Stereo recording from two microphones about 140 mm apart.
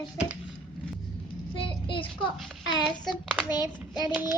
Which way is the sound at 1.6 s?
40° left (ahead or behind).